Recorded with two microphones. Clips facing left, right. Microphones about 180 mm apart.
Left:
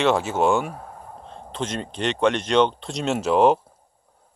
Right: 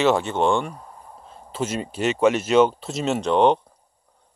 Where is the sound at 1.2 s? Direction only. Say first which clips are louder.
Right 2 dB; 5° right (ahead or behind).